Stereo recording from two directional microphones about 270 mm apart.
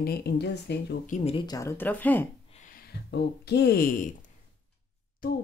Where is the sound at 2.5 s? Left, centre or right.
Left.